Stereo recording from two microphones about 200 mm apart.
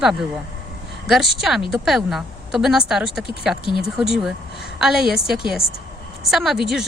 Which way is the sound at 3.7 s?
25° left (ahead or behind).